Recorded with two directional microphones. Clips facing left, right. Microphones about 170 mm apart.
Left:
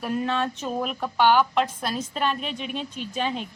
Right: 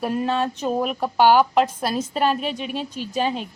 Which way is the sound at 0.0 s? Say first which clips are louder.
Right 3 dB; 40° right (ahead or behind).